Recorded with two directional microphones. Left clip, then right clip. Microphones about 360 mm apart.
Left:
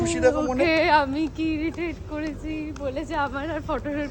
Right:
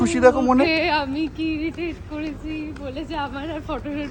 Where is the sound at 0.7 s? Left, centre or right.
Centre.